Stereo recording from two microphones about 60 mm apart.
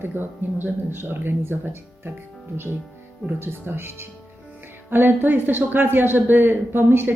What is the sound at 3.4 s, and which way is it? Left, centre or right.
Speech, right.